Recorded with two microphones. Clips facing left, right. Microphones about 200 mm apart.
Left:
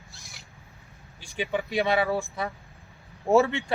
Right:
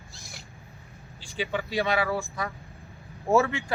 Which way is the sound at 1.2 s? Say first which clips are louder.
Left 1 dB; 15° left (ahead or behind).